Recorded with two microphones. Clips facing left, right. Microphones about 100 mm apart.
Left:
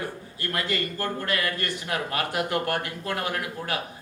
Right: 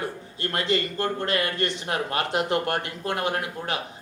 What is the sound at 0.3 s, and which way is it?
A man's voice, 25° right (ahead or behind).